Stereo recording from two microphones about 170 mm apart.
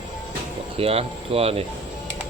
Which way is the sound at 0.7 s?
35° right (ahead or behind).